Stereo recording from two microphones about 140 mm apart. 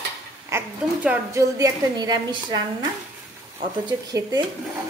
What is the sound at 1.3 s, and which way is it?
Speech, 25° right (ahead or behind).